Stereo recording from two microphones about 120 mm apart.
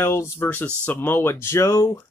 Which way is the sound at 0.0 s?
20° left (ahead or behind).